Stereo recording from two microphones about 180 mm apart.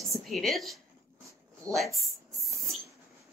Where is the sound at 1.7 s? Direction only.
Centre (ahead or behind).